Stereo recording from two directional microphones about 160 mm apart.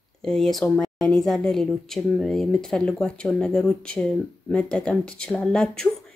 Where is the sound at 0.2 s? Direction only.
5° left (ahead or behind).